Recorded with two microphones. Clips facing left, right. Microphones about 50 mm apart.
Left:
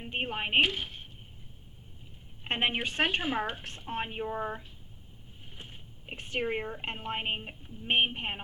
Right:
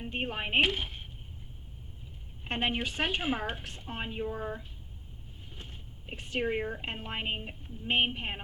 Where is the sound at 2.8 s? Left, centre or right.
Left.